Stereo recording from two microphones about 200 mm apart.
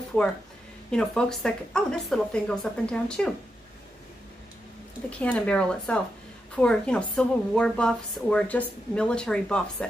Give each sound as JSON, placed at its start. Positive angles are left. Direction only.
{"t": 0.9, "sound": "a woman's voice", "side_deg": 5}
{"t": 5.2, "sound": "a woman's voice", "side_deg": 5}